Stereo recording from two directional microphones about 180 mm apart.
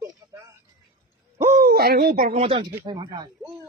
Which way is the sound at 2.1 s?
40° right (ahead or behind).